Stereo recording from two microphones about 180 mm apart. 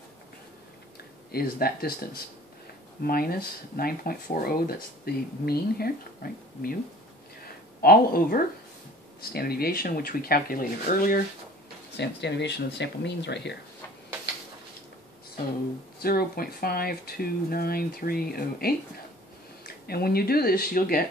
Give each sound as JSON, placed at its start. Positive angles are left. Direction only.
{"t": 1.3, "sound": "speech", "side_deg": 55}
{"t": 3.0, "sound": "speech", "side_deg": 55}
{"t": 7.8, "sound": "speech", "side_deg": 55}
{"t": 12.0, "sound": "speech", "side_deg": 70}
{"t": 16.0, "sound": "speech", "side_deg": 55}